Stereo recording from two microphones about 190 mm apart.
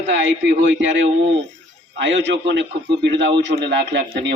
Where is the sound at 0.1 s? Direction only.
70° right (ahead or behind).